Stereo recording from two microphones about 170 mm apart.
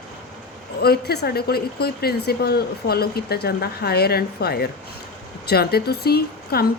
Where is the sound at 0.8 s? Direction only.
70° left (ahead or behind).